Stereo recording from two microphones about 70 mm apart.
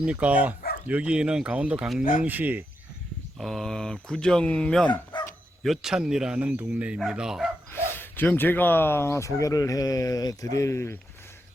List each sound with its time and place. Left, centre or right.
0.0 s speech: centre
3.3 s speech: centre
5.1 s bow-wow: left
5.6 s speech: centre
7.7 s speech: left